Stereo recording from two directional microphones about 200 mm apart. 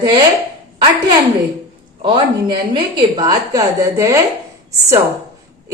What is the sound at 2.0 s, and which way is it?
Speech, 25° right (ahead or behind).